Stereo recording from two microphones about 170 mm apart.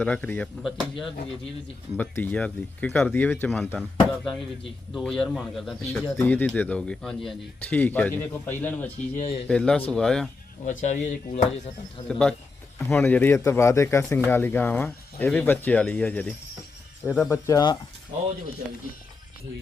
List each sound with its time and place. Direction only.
0.0 s speech: 10° left (ahead or behind)
9.1 s speech: 35° left (ahead or behind)
9.5 s speech: 5° left (ahead or behind)
10.7 s speech: 45° left (ahead or behind)
12.0 s speech: 5° left (ahead or behind); by 17.7 s 20° left (ahead or behind)